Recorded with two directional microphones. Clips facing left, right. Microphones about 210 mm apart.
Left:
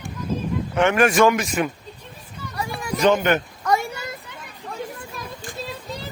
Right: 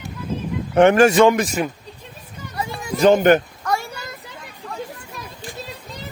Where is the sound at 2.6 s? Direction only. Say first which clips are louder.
Right 1 dB; 20° right (ahead or behind).